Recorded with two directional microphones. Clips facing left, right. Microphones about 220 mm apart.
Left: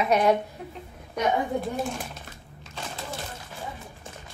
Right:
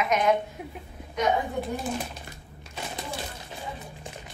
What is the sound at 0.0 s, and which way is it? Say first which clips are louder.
Speech: left 2 dB; 35° left (ahead or behind).